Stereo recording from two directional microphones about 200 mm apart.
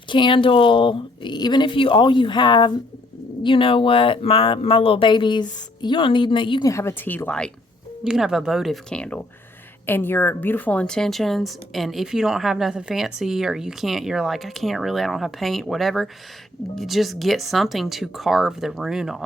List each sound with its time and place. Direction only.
0.1 s speech: 25° left (ahead or behind); by 19.2 s centre (ahead or behind)